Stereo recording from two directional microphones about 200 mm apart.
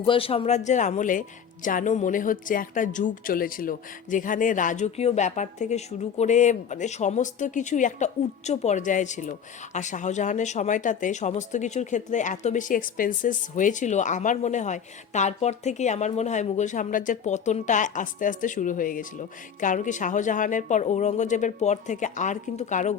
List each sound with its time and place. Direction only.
0.0 s speech: 25° left (ahead or behind)